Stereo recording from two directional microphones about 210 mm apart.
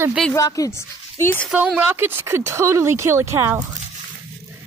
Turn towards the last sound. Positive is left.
turn(degrees=-10)  # may be behind; listen again after turning